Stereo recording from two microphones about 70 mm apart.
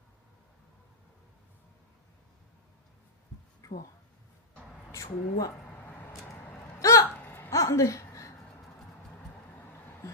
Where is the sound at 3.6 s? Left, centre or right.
Left.